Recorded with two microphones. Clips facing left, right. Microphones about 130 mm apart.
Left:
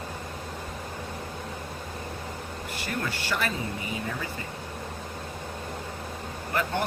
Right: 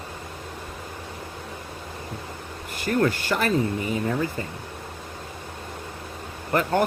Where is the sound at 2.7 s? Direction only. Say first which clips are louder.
Right 11 dB; 45° right (ahead or behind).